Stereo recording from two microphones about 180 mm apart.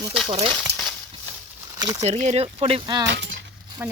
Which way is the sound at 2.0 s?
35° right (ahead or behind).